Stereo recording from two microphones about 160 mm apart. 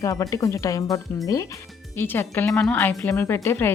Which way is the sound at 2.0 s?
15° left (ahead or behind).